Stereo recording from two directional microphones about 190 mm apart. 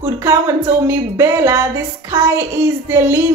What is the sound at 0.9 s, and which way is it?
A woman's voice, 15° right (ahead or behind).